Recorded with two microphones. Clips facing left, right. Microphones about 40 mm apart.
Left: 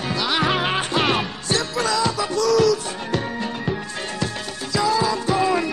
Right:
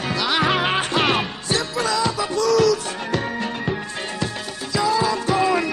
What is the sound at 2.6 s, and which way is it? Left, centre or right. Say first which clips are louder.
Music: even; right.